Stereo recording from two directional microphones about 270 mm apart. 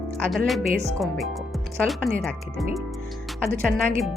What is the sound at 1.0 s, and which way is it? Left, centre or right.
Speech, centre.